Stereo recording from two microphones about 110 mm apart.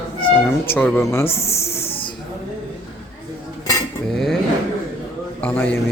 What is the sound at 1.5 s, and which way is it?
Speech, 25° left (ahead or behind).